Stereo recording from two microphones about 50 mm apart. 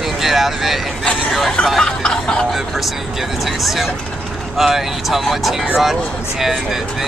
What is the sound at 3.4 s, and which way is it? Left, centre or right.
Speech, centre.